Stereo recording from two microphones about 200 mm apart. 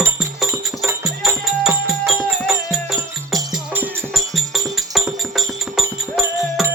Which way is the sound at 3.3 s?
Centre (ahead or behind).